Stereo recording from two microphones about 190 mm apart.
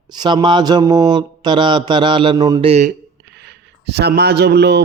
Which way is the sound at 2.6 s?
35° right (ahead or behind).